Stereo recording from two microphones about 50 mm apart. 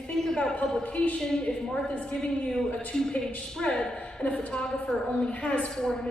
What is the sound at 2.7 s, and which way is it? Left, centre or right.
Speech, left.